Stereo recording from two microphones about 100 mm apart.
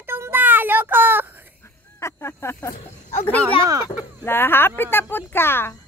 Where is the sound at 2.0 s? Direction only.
25° left (ahead or behind).